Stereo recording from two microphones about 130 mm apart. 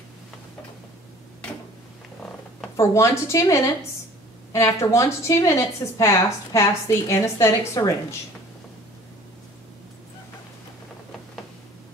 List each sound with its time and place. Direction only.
2.8 s a woman's voice: 20° left (ahead or behind)